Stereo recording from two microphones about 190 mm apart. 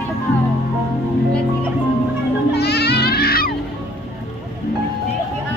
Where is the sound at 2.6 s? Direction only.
60° left (ahead or behind).